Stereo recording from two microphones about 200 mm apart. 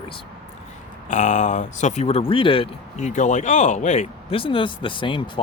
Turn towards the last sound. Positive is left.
turn(degrees=25)  # may be behind; listen again after turning